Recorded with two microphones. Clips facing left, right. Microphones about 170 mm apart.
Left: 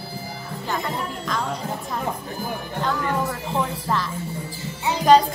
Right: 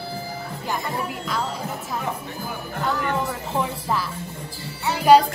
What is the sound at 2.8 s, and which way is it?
Speech, centre (ahead or behind).